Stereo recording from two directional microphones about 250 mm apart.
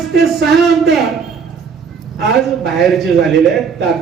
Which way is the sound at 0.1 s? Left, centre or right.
Right.